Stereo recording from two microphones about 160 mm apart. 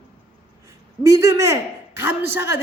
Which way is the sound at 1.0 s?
20° right (ahead or behind).